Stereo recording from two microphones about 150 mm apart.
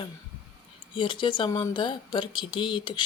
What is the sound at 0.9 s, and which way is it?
Speech, 35° left (ahead or behind).